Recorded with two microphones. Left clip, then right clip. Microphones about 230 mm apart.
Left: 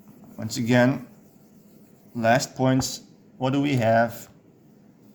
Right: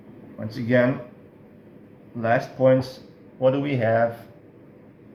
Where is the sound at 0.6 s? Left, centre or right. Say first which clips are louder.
Right 1 dB; left.